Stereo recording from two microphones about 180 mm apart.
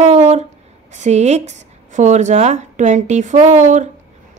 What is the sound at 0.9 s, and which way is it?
A woman's voice, 40° right (ahead or behind).